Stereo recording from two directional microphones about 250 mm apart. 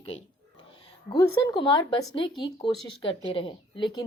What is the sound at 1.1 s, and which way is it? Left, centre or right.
Speech, centre.